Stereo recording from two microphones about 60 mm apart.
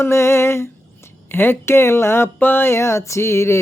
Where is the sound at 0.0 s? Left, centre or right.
Left.